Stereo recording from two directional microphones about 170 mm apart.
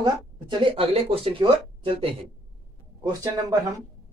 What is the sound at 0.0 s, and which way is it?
Speech, 30° right (ahead or behind).